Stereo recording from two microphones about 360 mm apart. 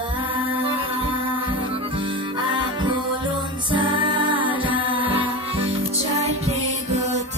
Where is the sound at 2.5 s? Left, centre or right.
Centre.